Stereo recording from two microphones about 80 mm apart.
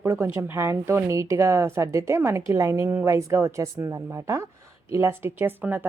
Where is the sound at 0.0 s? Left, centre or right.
Right.